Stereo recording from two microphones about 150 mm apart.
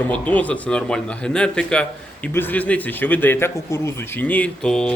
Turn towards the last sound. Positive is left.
turn(degrees=5)  # may be behind; listen again after turning